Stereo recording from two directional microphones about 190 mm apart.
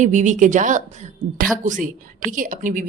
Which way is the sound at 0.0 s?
40° right (ahead or behind).